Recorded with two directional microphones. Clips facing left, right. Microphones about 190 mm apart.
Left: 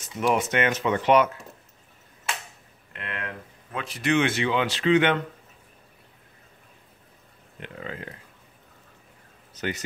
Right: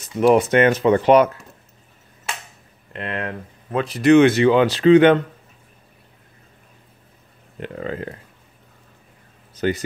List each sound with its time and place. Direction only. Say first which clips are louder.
0.2 s speech: right 9 dB; 35° right (ahead or behind)
2.9 s speech: right 8 dB; 35° right (ahead or behind)
7.6 s speech: right 9 dB; 40° right (ahead or behind)
9.6 s a man's voice: right 9 dB; 30° right (ahead or behind)